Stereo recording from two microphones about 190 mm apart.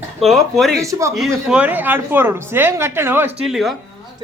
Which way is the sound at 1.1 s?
Centre (ahead or behind).